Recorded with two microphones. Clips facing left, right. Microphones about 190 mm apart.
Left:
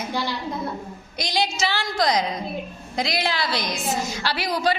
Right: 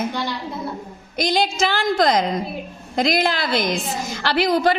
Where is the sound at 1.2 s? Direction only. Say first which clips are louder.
Right 5 dB; 55° right (ahead or behind).